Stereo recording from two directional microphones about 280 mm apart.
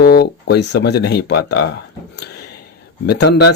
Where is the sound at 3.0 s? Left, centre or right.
Left.